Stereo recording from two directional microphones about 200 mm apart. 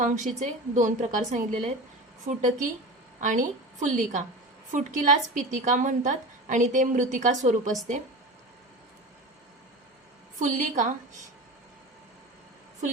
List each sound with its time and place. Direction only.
0.0 s a woman's voice: 35° right (ahead or behind)
10.4 s a woman's voice: 40° right (ahead or behind)